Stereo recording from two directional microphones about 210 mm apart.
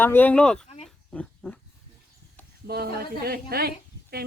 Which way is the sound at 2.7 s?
50° right (ahead or behind).